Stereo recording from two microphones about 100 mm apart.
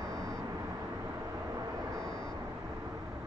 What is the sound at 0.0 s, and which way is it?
Vehicle, 35° right (ahead or behind).